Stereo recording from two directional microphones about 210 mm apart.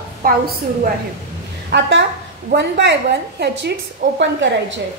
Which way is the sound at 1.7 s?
60° right (ahead or behind).